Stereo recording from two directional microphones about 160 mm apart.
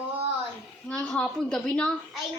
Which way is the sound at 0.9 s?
5° left (ahead or behind).